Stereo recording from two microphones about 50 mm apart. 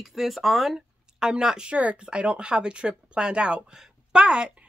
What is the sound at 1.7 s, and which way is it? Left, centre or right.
A woman's voice, right.